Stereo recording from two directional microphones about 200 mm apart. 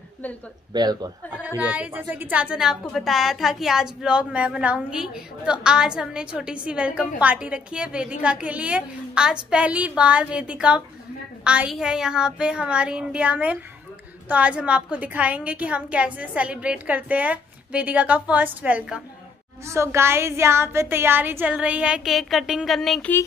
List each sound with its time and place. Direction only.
0.7 s speech: 20° right (ahead or behind)
1.6 s a woman's voice: 10° right (ahead or behind)